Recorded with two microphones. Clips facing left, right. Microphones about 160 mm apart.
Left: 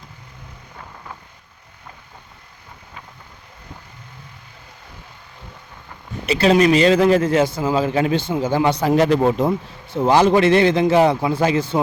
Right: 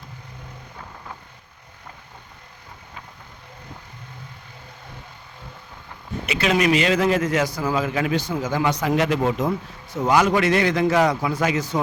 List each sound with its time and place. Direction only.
6.2 s a man's voice: 35° left (ahead or behind)